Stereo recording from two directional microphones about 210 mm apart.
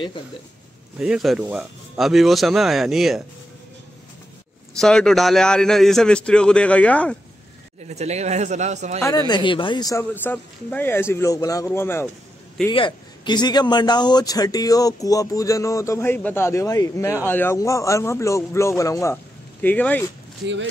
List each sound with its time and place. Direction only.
0.9 s a man's voice: 5° right (ahead or behind)
4.7 s a man's voice: 5° left (ahead or behind)
7.8 s speech: 30° right (ahead or behind)
9.3 s a man's voice: 25° left (ahead or behind)
12.6 s a man's voice: 20° left (ahead or behind)